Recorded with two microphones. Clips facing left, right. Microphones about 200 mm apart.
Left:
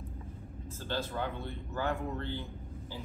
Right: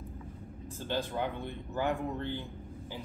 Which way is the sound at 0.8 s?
15° right (ahead or behind).